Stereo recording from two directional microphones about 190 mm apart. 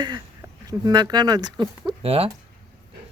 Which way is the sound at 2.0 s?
30° right (ahead or behind).